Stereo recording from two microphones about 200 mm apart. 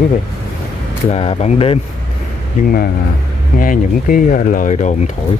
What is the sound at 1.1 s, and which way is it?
Speech, 30° left (ahead or behind).